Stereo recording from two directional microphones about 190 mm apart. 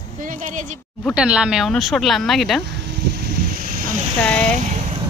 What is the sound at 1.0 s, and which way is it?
Speech, 5° right (ahead or behind).